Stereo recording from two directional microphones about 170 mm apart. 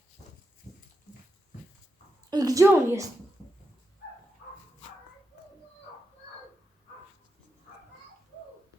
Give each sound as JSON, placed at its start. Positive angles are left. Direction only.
{"t": 2.3, "sound": "a woman's voice", "side_deg": -20}